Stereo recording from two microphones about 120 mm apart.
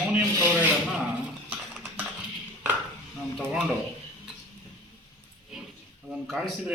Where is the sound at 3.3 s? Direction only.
5° right (ahead or behind).